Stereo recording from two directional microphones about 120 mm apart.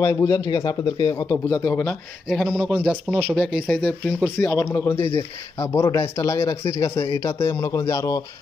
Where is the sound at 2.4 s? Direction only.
10° right (ahead or behind).